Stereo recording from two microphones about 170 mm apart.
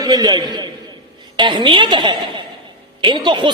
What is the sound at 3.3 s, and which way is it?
Speech, 25° right (ahead or behind).